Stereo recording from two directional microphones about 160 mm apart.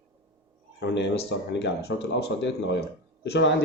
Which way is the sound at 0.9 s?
90° left.